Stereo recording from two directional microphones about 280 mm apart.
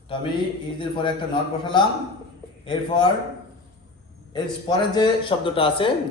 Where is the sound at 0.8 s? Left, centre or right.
Centre.